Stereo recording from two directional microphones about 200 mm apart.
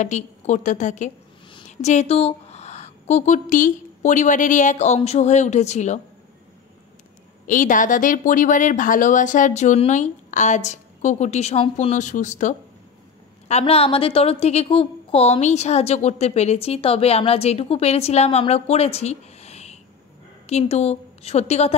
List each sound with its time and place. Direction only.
0.0 s a woman's voice: 35° left (ahead or behind)
7.4 s a woman's voice: 40° left (ahead or behind)